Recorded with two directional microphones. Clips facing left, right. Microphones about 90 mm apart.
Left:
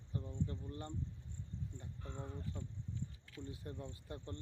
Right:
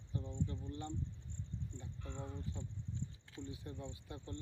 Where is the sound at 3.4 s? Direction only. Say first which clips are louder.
Even; 40° left (ahead or behind).